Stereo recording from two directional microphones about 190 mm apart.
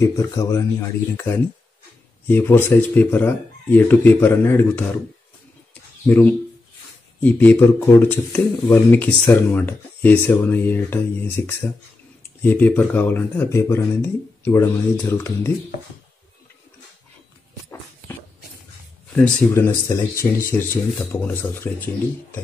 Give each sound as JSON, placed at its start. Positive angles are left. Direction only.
{"t": 0.0, "sound": "speech", "side_deg": 15}
{"t": 6.0, "sound": "speech", "side_deg": 10}
{"t": 19.1, "sound": "speech", "side_deg": 10}